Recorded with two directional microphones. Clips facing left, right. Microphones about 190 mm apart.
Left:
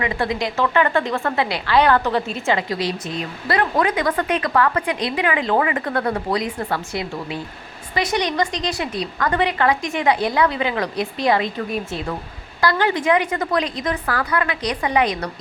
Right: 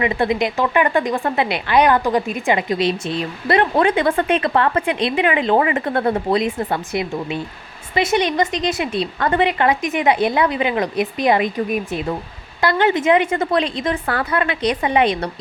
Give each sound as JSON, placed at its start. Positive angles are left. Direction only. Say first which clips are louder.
{"t": 0.0, "sound": "speech", "louder": "right 4 dB", "side_deg": -20}